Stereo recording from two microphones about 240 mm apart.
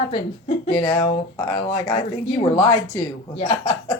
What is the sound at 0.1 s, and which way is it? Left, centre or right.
Speech, left.